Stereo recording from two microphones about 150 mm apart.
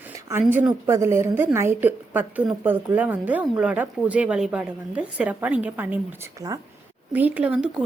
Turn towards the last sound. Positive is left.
turn(degrees=-5)  # may be behind; listen again after turning